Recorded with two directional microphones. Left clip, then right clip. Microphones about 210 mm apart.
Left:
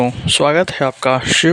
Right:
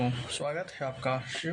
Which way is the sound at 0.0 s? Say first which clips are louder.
Left 19 dB; 50° left (ahead or behind).